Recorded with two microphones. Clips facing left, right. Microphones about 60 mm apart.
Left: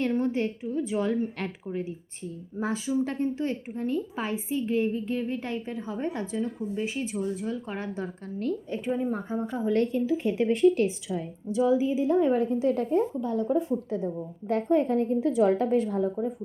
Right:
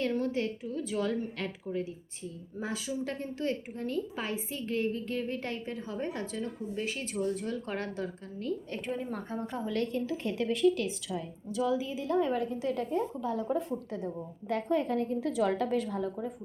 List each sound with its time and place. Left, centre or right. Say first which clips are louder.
0.0 s a woman's voice: left 4 dB; left
1.4 s a woman's voice: left 2 dB; left; by 7.2 s centre
7.2 s a woman's voice: right 1 dB; centre
9.6 s a woman's voice: left 8 dB; left
9.9 s a woman's voice: left 7 dB; centre
10.3 s a woman's voice: left 5 dB; left
13.2 s speech: left 5 dB; centre
13.7 s a woman's voice: left 6 dB; left